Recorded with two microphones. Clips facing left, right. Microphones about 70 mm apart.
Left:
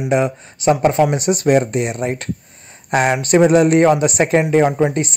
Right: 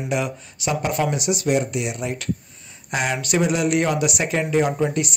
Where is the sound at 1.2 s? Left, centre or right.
Left.